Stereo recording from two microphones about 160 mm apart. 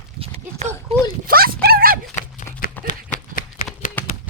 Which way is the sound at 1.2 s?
70° right (ahead or behind).